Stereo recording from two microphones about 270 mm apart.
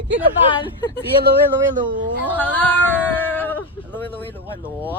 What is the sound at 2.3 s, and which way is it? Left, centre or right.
Speech, centre.